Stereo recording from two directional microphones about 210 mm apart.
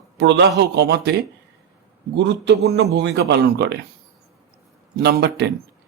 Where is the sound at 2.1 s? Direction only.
55° right (ahead or behind).